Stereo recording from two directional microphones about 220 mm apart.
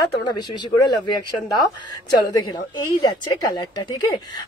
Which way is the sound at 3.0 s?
20° left (ahead or behind).